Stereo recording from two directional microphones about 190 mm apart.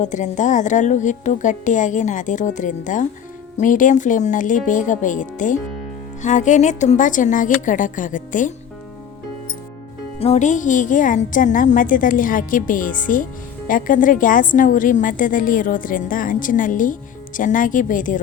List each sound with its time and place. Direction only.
0.0 s a woman's voice: 40° left (ahead or behind)
10.2 s a woman's voice: 35° left (ahead or behind)